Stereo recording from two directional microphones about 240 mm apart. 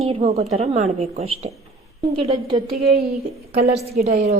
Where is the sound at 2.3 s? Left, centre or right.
Centre.